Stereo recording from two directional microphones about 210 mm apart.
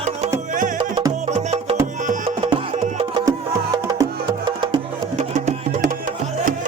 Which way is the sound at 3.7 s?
20° right (ahead or behind).